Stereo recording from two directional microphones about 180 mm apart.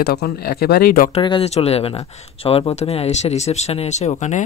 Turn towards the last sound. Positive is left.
turn(degrees=40)  # may be behind; listen again after turning